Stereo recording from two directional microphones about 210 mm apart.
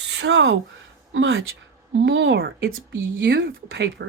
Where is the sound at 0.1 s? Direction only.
55° right (ahead or behind).